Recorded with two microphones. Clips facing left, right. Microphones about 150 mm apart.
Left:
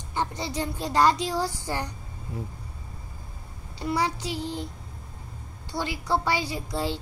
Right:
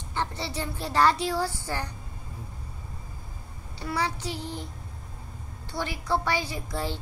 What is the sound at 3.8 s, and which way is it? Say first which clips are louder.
Speech: left 3 dB; 10° left (ahead or behind).